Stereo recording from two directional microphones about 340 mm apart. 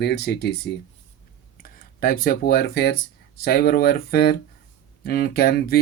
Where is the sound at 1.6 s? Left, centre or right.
Left.